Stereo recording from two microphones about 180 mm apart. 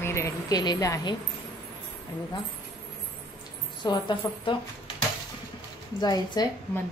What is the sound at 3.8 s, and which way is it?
Speech, 25° left (ahead or behind).